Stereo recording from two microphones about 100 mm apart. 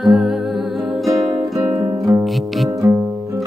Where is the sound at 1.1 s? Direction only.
35° right (ahead or behind).